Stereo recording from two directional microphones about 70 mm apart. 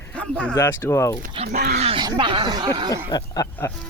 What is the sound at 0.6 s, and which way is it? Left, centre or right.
Speech, left.